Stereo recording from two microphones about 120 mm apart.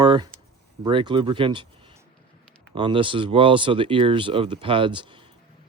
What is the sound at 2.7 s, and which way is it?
Speech, 45° right (ahead or behind).